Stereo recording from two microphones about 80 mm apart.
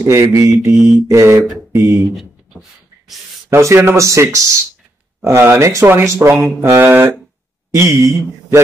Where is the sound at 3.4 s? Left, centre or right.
Right.